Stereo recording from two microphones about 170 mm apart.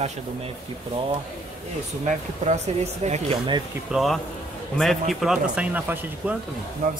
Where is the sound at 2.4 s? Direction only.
45° right (ahead or behind).